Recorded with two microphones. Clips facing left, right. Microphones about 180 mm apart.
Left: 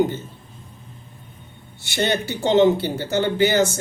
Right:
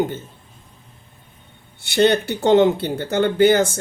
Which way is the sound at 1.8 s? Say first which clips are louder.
Right 6 dB; 55° right (ahead or behind).